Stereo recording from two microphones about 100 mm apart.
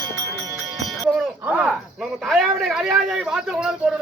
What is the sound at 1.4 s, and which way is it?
Speech, 15° right (ahead or behind).